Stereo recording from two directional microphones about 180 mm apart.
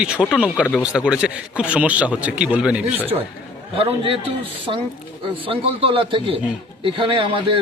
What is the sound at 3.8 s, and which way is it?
Speech, 30° right (ahead or behind).